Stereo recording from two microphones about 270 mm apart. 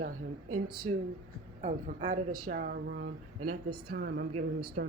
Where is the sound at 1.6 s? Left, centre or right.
Right.